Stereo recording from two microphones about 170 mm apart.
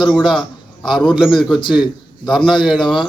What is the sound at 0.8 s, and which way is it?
Speech, 25° left (ahead or behind).